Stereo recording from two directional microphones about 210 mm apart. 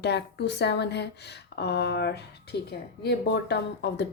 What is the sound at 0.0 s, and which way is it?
A woman's voice, 55° left (ahead or behind).